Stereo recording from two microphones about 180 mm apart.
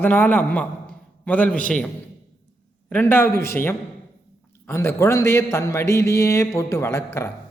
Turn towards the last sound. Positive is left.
turn(degrees=15)  # may be behind; listen again after turning